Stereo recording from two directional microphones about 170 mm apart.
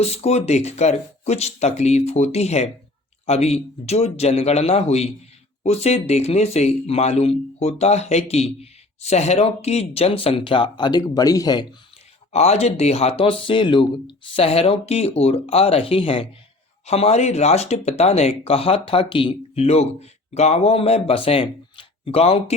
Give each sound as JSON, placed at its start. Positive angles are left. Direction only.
{"t": 0.0, "sound": "speech", "side_deg": 35}
{"t": 12.3, "sound": "speech", "side_deg": 40}